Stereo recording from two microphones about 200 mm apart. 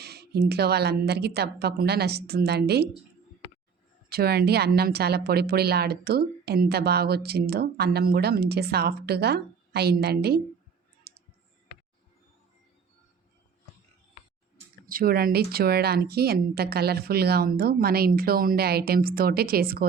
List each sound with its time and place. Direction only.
0.0 s speech: 55° right (ahead or behind)
4.1 s speech: 50° right (ahead or behind)
11.1 s clicking: 50° right (ahead or behind)
14.8 s speech: 45° right (ahead or behind)